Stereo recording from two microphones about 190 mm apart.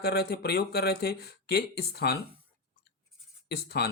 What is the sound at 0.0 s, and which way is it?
Speech, 55° left (ahead or behind).